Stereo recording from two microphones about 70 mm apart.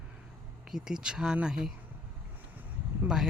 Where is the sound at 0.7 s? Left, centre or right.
Centre.